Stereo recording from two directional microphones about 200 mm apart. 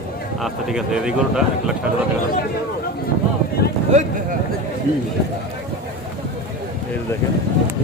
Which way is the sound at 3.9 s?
35° right (ahead or behind).